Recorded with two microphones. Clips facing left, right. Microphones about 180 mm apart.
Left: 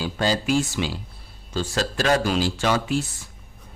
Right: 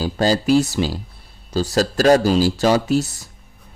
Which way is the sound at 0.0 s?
40° right (ahead or behind).